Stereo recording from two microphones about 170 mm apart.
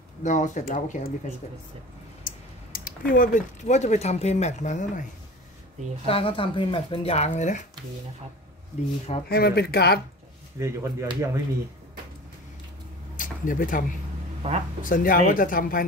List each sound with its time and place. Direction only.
0.2 s speech: 45° left (ahead or behind)
2.2 s speech: 55° left (ahead or behind)
6.0 s speech: 35° left (ahead or behind)
9.3 s speech: 70° left (ahead or behind)
10.6 s speech: 15° right (ahead or behind)
13.1 s a sound: 50° left (ahead or behind)
14.4 s speech: 35° right (ahead or behind)
14.8 s speech: 55° left (ahead or behind)